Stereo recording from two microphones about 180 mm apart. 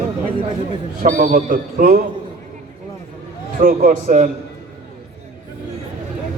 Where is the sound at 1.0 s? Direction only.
55° right (ahead or behind).